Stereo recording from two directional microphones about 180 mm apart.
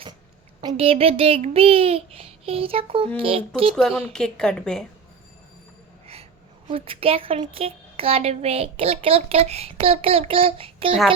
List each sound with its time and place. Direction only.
0.8 s a child's voice: 35° right (ahead or behind)
3.8 s a woman's voice: 5° left (ahead or behind)
6.7 s a child's voice: 30° right (ahead or behind)